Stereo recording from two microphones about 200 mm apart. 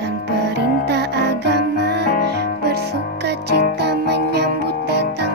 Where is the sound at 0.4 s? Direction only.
55° right (ahead or behind).